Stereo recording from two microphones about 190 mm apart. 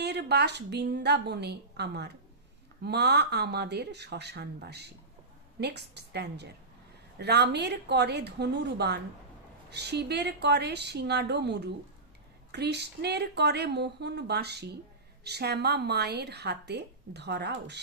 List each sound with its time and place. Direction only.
0.0 s a woman's voice: 60° right (ahead or behind)